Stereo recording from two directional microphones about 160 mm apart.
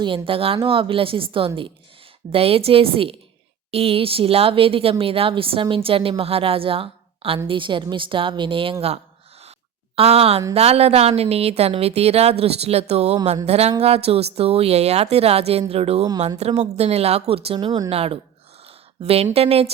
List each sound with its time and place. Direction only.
0.0 s speech: 35° right (ahead or behind)
9.9 s speech: 35° right (ahead or behind)
13.2 s a sound: 45° right (ahead or behind)
13.8 s speech: 40° right (ahead or behind)